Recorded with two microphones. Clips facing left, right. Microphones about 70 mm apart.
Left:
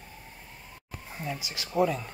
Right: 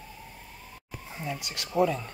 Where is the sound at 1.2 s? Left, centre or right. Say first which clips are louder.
Even; centre.